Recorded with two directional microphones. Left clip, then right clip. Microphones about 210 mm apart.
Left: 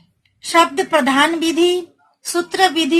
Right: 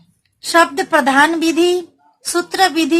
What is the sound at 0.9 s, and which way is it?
Speech, 20° right (ahead or behind).